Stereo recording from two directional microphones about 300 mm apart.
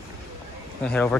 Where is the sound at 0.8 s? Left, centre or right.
Centre.